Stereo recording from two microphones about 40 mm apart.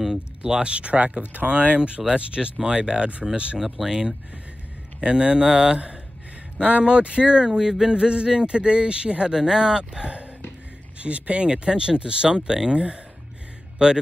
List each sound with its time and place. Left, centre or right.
0.4 s speech: right
3.5 s speech: centre
10.0 s speech: right